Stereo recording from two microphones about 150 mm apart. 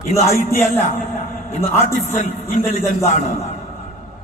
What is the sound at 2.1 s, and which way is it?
Speech, 55° left (ahead or behind).